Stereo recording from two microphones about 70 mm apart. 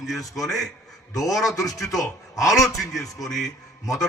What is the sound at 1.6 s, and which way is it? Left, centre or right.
Speech, left.